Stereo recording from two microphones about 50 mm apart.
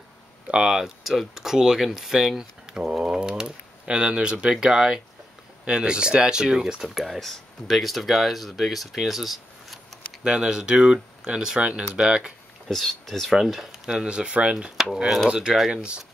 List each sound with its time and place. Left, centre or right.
0.5 s speech: centre
2.7 s speech: centre
10.2 s speech: centre
12.6 s speech: centre
13.3 s speech: centre